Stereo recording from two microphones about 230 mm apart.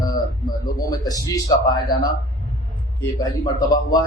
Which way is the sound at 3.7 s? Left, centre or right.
Centre.